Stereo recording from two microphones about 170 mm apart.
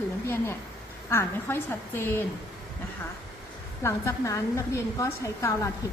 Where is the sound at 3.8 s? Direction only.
15° left (ahead or behind).